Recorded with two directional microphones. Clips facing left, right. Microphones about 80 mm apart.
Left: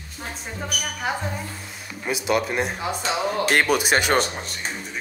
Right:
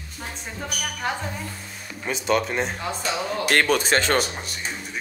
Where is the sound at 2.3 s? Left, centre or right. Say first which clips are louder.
Even; centre.